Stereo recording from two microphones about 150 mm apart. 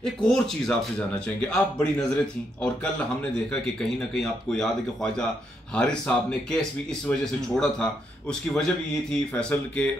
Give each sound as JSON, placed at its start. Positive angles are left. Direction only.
{"t": 0.0, "sound": "speech", "side_deg": 5}